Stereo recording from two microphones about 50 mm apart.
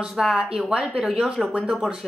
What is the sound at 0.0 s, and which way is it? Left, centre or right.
Speech, centre.